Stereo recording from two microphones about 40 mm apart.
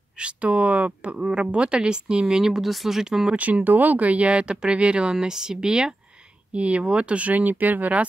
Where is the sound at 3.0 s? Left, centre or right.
Centre.